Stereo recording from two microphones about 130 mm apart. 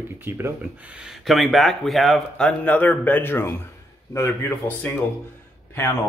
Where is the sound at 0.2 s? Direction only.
15° right (ahead or behind).